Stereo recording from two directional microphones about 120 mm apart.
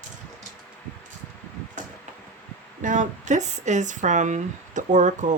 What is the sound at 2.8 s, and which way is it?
Speech, 90° right.